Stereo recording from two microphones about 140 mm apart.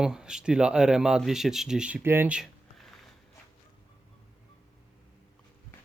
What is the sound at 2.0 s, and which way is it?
Speech, 15° right (ahead or behind).